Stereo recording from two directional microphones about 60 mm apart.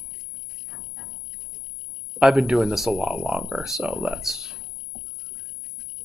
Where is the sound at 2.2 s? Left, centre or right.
Centre.